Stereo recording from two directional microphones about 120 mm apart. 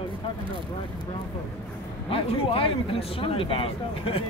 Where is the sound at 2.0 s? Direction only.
50° left (ahead or behind).